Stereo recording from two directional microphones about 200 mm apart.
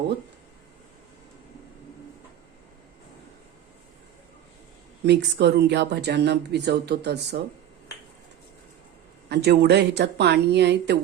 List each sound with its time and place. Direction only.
5.0 s speech: 60° right (ahead or behind)
9.3 s speech: 55° right (ahead or behind)